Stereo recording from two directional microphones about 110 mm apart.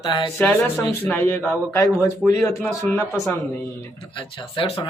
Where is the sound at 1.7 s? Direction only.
30° left (ahead or behind).